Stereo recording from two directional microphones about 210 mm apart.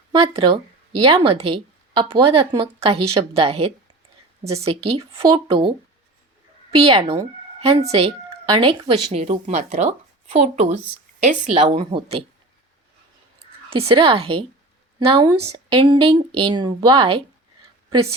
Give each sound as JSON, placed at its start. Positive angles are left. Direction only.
{"t": 0.1, "sound": "a woman's voice", "side_deg": -25}
{"t": 6.7, "sound": "a woman's voice", "side_deg": -25}
{"t": 13.8, "sound": "a woman's voice", "side_deg": -25}